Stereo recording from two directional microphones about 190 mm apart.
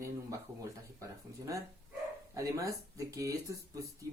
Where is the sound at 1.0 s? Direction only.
15° right (ahead or behind).